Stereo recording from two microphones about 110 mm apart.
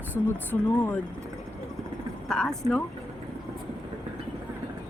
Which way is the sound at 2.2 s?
5° left (ahead or behind).